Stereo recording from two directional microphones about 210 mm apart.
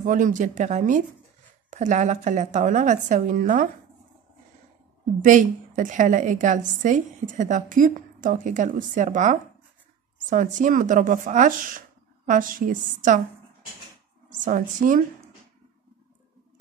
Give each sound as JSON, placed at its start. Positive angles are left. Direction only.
{"t": 0.0, "sound": "a woman's voice", "side_deg": -40}
{"t": 5.2, "sound": "a woman's voice", "side_deg": -40}
{"t": 14.4, "sound": "a woman's voice", "side_deg": -40}